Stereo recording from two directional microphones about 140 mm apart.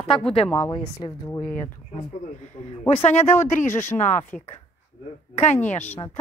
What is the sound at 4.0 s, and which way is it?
A woman's voice, 60° left (ahead or behind).